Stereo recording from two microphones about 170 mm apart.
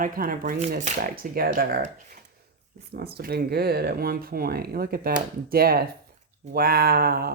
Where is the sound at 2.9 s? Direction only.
65° right (ahead or behind).